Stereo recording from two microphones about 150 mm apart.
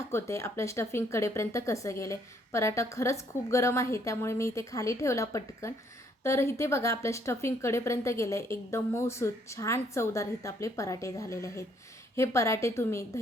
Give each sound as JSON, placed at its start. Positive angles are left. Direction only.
{"t": 0.1, "sound": "speech", "side_deg": 20}